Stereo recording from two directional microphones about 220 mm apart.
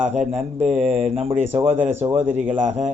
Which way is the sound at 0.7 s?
30° right (ahead or behind).